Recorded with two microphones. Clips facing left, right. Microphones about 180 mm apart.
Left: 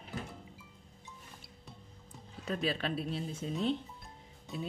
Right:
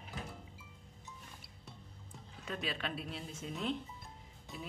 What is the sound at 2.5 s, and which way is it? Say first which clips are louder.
A woman's voice: left 6 dB; 35° left (ahead or behind).